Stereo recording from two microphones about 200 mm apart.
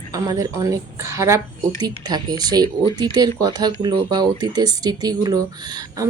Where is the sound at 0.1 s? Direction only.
15° right (ahead or behind).